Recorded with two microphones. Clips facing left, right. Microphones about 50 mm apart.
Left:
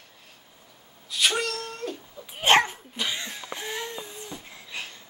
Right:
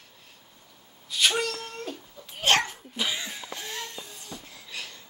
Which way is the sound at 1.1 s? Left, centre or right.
Centre.